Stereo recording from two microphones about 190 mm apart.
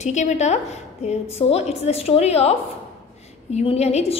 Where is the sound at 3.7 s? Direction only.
35° left (ahead or behind).